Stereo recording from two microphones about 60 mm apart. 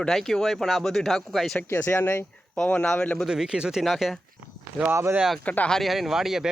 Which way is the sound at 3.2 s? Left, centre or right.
Centre.